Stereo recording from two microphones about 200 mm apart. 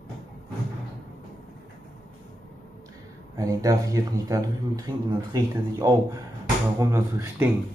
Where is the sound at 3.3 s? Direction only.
15° right (ahead or behind).